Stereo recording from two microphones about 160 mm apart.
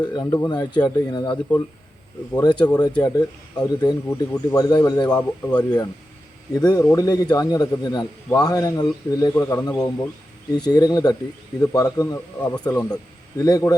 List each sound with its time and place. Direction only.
0.0 s a man's voice: 25° left (ahead or behind)